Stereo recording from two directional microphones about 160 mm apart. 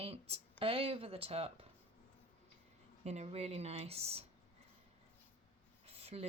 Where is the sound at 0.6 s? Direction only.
35° right (ahead or behind).